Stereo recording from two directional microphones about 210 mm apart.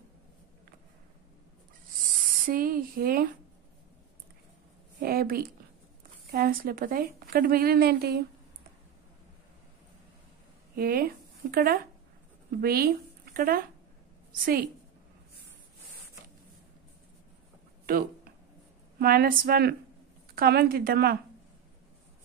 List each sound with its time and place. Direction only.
2.4 s a woman's voice: 40° right (ahead or behind)
5.0 s a woman's voice: 45° right (ahead or behind)
10.8 s a woman's voice: 45° right (ahead or behind)
18.9 s a woman's voice: 45° right (ahead or behind)